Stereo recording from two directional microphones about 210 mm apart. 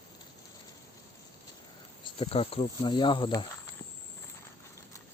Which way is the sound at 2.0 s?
25° left (ahead or behind).